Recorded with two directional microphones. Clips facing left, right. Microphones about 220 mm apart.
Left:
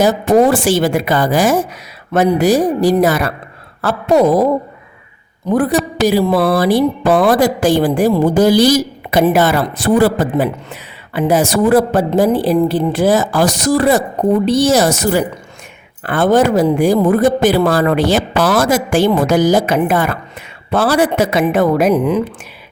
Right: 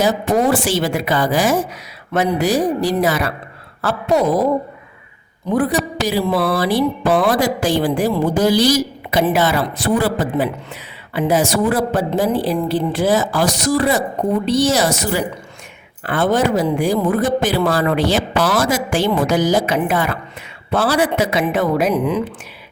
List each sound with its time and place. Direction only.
0.0 s a woman's voice: 50° left (ahead or behind)
5.5 s speech: 50° left (ahead or behind)